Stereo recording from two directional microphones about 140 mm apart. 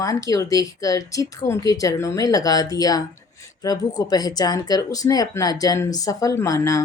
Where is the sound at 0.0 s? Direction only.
25° left (ahead or behind).